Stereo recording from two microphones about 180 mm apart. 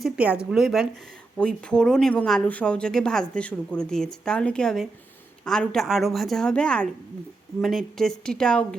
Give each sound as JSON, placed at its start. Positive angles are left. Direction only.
{"t": 0.0, "sound": "speech", "side_deg": -5}